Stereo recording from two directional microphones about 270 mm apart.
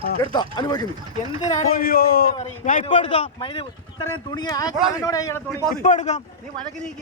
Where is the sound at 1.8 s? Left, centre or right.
Left; by 5.6 s centre.